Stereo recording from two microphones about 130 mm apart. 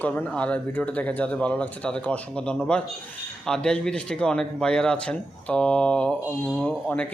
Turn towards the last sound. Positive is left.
turn(degrees=10)  # may be behind; listen again after turning